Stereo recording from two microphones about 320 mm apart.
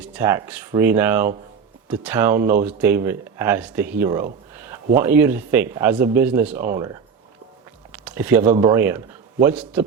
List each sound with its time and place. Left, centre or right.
0.0 s speech: centre
7.9 s speech: centre